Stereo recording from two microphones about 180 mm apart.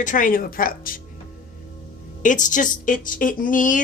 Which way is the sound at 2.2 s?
45° left (ahead or behind).